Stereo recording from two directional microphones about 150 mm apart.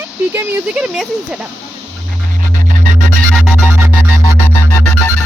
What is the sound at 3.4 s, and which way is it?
Music, 10° right (ahead or behind).